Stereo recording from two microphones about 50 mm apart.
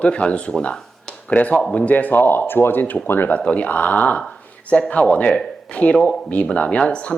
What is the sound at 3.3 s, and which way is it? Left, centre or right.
Speech, left.